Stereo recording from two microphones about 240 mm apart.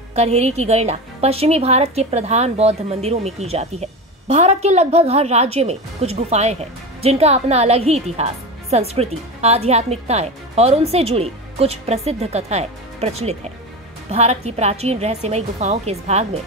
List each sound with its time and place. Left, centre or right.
0.1 s a woman's voice: right